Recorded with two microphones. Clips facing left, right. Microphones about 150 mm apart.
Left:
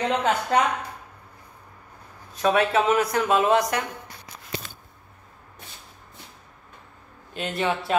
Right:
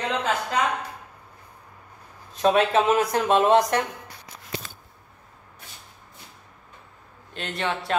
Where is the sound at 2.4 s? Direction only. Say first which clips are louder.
Right 1 dB; 30° right (ahead or behind).